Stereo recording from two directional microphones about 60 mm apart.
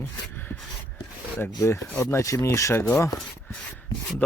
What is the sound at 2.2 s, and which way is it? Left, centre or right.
Speech, left.